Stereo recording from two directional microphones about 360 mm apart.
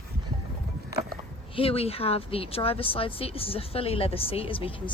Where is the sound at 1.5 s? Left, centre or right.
Centre.